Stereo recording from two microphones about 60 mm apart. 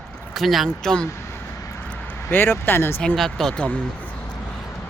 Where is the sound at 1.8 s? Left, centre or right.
Left.